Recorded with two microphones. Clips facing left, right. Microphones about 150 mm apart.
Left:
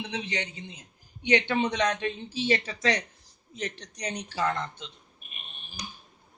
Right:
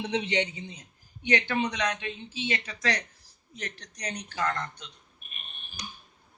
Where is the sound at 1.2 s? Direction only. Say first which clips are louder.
Left 2 dB; 20° left (ahead or behind).